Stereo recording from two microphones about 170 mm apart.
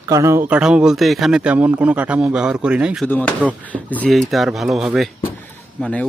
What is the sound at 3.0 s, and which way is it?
Speech, 10° left (ahead or behind).